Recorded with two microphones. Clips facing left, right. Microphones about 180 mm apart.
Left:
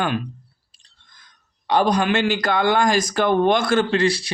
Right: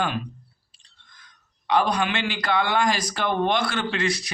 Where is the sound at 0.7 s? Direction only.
40° left (ahead or behind).